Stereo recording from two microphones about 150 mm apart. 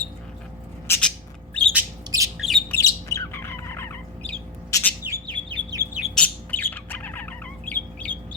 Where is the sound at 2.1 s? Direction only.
30° right (ahead or behind).